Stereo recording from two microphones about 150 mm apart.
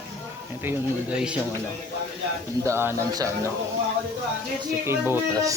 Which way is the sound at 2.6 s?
15° right (ahead or behind).